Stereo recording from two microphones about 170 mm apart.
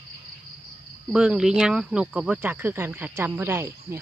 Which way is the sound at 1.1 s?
5° right (ahead or behind).